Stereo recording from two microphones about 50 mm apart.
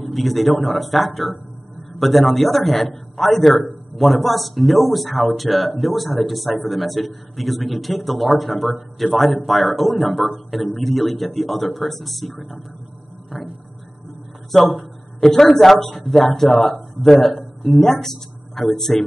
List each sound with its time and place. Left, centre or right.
0.0 s a man's voice: centre
14.5 s a man's voice: centre